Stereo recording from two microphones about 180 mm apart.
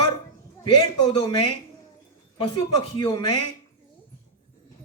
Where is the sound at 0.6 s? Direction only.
25° left (ahead or behind).